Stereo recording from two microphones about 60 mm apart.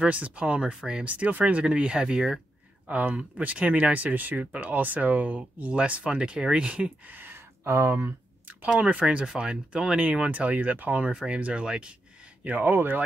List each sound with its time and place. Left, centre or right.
0.0 s speech: right
1.0 s speech: right
2.9 s speech: right
7.6 s speech: right
8.6 s speech: right
12.4 s speech: right